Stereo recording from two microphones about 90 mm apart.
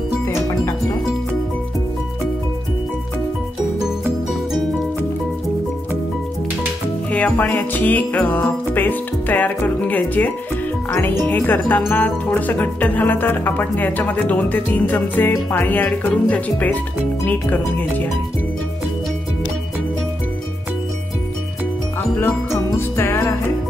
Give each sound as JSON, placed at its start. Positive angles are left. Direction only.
{"t": 7.1, "sound": "speech", "side_deg": 15}
{"t": 22.2, "sound": "music", "side_deg": 30}